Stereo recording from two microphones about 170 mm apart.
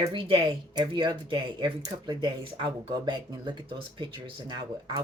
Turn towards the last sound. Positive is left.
turn(degrees=-25)  # may be behind; listen again after turning